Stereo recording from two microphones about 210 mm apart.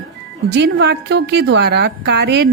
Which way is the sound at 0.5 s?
55° right (ahead or behind).